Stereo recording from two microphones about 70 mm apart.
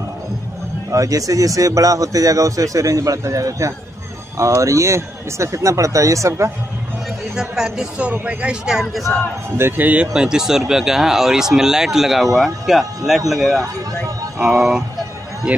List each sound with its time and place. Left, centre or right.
0.9 s a man's voice: right
7.3 s speech: centre
9.6 s a man's voice: right
10.1 s speech: centre